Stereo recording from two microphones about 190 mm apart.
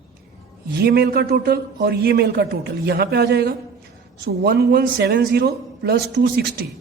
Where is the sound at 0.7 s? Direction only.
60° right (ahead or behind).